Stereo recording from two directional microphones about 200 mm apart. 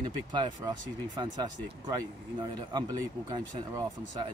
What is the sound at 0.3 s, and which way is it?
Speech, 20° right (ahead or behind).